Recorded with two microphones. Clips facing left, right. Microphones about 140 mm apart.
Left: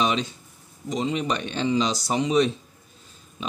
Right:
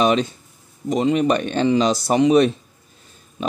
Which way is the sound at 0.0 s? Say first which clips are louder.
Right 7 dB; 50° right (ahead or behind).